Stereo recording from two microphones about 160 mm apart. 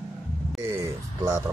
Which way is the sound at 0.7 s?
15° right (ahead or behind).